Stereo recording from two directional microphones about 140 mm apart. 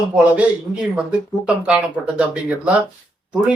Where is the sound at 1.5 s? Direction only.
5° right (ahead or behind).